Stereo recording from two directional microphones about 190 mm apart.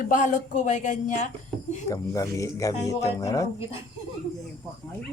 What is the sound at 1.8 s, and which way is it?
Speech, 15° left (ahead or behind).